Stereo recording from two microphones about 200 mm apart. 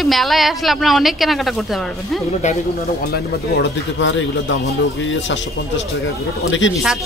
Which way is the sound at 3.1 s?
65° left (ahead or behind).